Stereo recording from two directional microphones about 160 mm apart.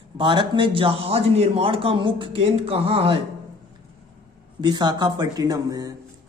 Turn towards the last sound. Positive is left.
turn(degrees=-25)  # may be behind; listen again after turning